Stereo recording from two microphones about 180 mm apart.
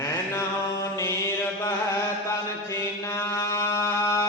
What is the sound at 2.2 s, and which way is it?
Music, 15° left (ahead or behind).